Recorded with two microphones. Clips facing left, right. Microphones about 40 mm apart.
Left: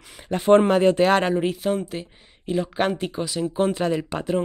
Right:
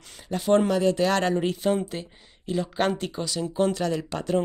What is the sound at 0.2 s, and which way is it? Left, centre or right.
Speech, left.